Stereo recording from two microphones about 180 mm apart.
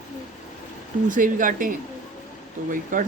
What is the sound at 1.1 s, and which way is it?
Speech, 50° right (ahead or behind).